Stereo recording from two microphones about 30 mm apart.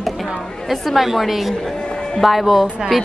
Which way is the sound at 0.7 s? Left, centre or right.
Centre.